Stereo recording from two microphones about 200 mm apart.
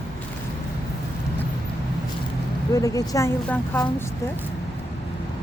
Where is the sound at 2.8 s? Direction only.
15° left (ahead or behind).